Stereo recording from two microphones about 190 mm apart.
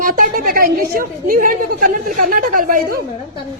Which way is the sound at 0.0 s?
50° right (ahead or behind).